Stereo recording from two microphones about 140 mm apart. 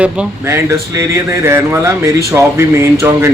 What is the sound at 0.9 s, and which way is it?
Speech, 20° right (ahead or behind).